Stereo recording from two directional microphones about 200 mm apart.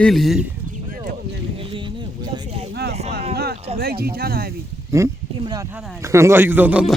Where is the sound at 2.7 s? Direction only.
55° right (ahead or behind).